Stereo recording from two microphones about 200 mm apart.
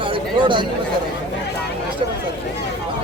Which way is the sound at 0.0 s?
25° right (ahead or behind).